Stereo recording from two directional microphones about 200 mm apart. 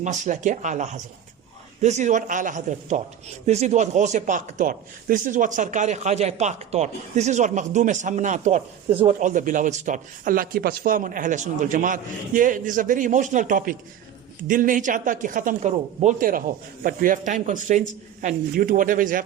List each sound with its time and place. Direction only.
0.0 s speech: 40° right (ahead or behind)